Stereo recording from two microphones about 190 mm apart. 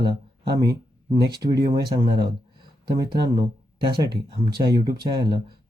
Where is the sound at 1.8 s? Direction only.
55° right (ahead or behind).